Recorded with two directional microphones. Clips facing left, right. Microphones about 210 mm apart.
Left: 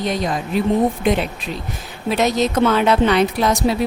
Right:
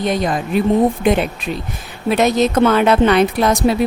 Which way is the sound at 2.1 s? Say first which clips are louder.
Right 3 dB; 55° right (ahead or behind).